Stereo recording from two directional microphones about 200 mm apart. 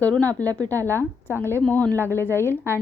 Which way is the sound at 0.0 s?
10° left (ahead or behind).